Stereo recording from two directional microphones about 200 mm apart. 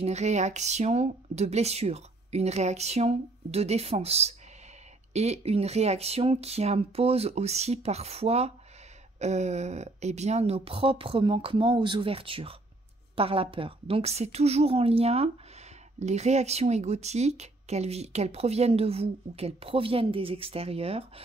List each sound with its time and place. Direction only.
0.0 s speech: 35° right (ahead or behind)